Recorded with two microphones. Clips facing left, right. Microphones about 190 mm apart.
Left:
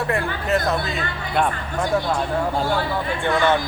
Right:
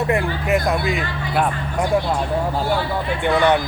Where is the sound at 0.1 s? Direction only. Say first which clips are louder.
Right 3 dB; 15° right (ahead or behind).